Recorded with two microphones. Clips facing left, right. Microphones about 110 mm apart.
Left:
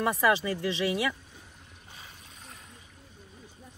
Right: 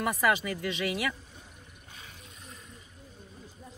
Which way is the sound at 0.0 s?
25° left (ahead or behind).